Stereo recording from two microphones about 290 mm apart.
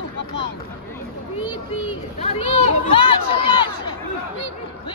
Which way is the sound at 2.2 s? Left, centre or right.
Left.